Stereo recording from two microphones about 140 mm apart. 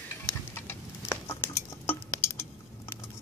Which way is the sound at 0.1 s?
15° left (ahead or behind).